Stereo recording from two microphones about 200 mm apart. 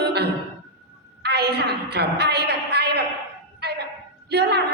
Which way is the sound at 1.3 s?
55° right (ahead or behind).